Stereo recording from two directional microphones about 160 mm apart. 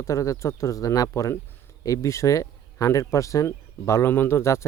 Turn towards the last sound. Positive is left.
turn(degrees=15)  # may be behind; listen again after turning